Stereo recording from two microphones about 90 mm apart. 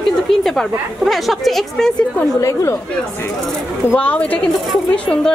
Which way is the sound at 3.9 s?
15° left (ahead or behind).